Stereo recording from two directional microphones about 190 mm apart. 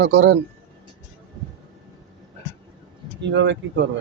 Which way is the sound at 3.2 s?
70° right (ahead or behind).